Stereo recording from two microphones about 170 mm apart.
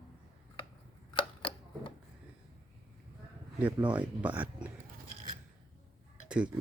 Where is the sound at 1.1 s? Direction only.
30° left (ahead or behind).